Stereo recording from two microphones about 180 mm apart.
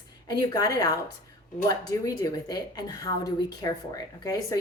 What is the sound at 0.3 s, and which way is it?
A woman's voice, 20° left (ahead or behind).